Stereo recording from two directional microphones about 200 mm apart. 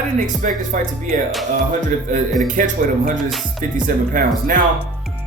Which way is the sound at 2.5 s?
40° right (ahead or behind).